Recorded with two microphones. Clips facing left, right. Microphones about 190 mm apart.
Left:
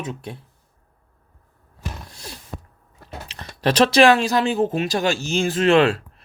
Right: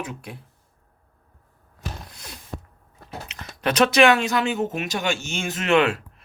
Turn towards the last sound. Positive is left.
turn(degrees=30)  # may be behind; listen again after turning